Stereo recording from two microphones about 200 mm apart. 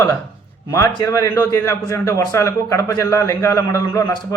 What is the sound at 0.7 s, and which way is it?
A man's voice, 15° left (ahead or behind).